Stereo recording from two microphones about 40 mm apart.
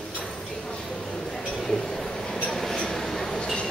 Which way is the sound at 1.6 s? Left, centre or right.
Centre.